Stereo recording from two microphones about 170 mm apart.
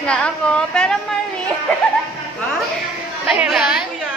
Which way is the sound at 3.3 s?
5° right (ahead or behind).